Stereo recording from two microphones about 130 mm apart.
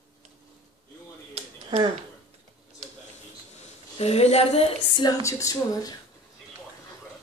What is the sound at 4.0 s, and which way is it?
Speech, 55° left (ahead or behind).